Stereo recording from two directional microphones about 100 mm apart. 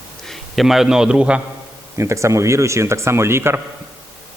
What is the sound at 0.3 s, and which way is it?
A man's voice, centre (ahead or behind).